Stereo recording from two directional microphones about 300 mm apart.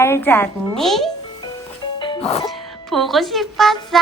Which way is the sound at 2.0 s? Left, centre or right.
Centre.